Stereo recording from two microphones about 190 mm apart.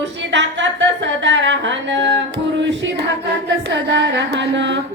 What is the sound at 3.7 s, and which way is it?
Speech, 65° right (ahead or behind).